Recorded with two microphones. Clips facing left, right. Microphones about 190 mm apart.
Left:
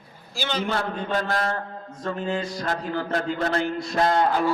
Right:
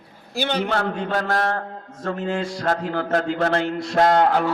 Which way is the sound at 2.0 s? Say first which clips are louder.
Right 2 dB; 80° right.